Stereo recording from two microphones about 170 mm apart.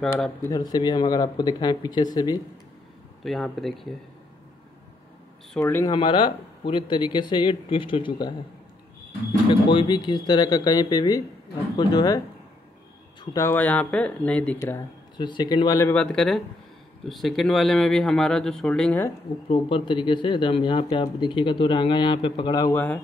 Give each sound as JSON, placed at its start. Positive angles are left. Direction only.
{"t": 0.4, "sound": "speech", "side_deg": 20}
{"t": 3.3, "sound": "a man's voice", "side_deg": 0}
{"t": 5.6, "sound": "speech", "side_deg": 15}
{"t": 9.5, "sound": "speech", "side_deg": 30}
{"t": 13.2, "sound": "speech", "side_deg": 20}
{"t": 15.1, "sound": "speech", "side_deg": 25}
{"t": 15.9, "sound": "a man's voice", "side_deg": 5}
{"t": 19.5, "sound": "speech", "side_deg": 30}